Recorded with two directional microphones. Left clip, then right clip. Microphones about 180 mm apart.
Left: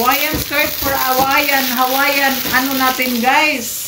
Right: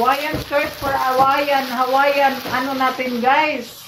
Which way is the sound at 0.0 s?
20° left (ahead or behind).